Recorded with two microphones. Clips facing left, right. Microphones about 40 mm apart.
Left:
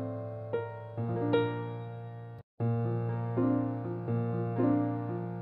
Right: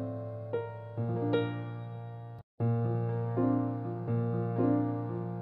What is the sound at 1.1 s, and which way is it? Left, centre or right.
Music, centre.